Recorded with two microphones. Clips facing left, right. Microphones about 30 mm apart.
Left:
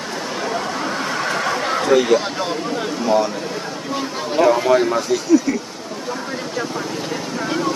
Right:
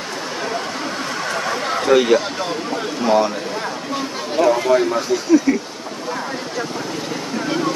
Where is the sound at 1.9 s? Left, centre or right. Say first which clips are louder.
Right 1 dB; centre.